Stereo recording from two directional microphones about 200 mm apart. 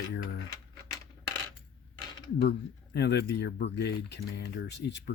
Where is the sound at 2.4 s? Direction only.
60° left (ahead or behind).